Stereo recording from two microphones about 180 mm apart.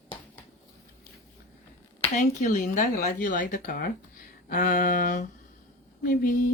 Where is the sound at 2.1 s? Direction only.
40° left (ahead or behind).